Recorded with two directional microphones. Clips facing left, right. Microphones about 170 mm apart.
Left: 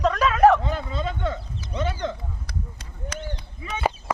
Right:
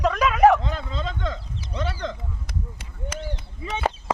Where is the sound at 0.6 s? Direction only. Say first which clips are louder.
Left 2 dB; 10° left (ahead or behind).